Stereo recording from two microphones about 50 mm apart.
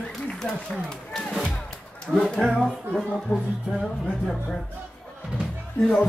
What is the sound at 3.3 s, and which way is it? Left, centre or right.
Speech, left.